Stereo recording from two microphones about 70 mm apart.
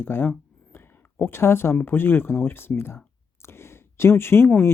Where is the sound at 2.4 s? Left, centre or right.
Left.